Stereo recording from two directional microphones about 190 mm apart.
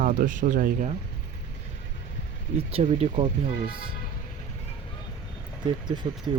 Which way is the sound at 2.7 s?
30° right (ahead or behind).